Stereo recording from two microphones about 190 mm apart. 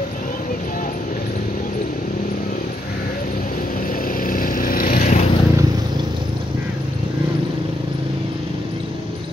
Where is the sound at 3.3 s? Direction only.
45° left (ahead or behind).